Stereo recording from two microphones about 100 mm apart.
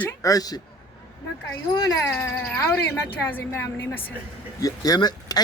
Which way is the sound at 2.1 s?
15° left (ahead or behind).